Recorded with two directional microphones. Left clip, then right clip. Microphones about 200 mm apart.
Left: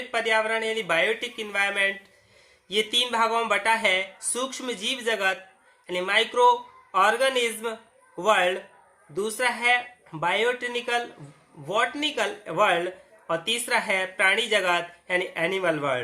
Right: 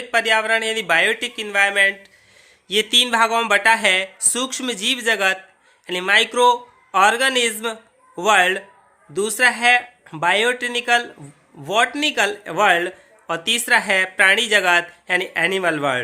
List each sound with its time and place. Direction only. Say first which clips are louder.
0.1 s a man's voice: right 7 dB; 50° right (ahead or behind)